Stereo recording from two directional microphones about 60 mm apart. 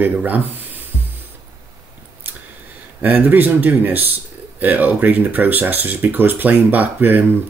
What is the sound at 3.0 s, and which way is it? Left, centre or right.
Speech, right.